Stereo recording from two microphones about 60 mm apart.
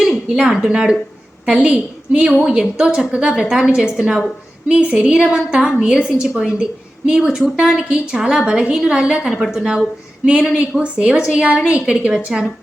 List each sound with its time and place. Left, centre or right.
0.0 s a woman's voice: centre